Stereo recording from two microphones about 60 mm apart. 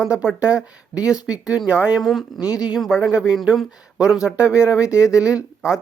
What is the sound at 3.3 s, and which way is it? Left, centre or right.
Speech, centre.